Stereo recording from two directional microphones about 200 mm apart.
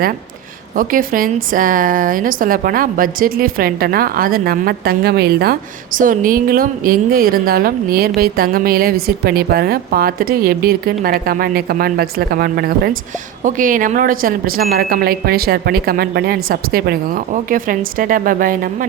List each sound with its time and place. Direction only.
0.8 s a woman's voice: 45° right (ahead or behind)